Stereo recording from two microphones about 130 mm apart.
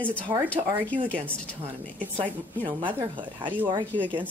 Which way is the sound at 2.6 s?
15° right (ahead or behind).